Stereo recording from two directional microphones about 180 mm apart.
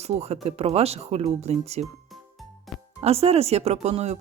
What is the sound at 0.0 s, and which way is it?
Speech, 35° right (ahead or behind).